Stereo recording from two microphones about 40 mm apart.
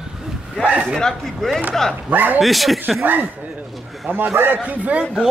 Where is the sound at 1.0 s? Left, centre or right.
Centre.